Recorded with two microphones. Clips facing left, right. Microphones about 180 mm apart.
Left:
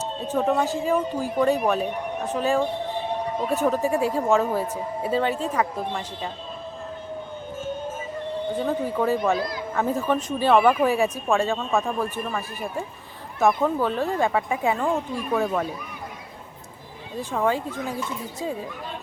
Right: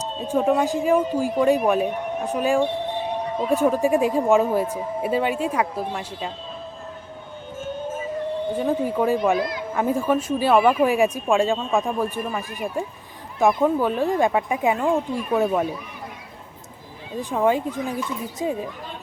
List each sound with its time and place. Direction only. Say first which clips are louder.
0.0 s speech: right 2 dB; 10° right (ahead or behind)
8.5 s speech: right 2 dB; 10° right (ahead or behind)
17.2 s speech: right 3 dB; 15° right (ahead or behind)